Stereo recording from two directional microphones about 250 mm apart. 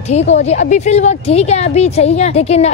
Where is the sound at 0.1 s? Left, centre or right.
Left.